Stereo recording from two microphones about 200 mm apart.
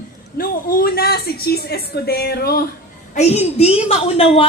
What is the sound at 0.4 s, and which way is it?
A woman's voice, 45° left (ahead or behind).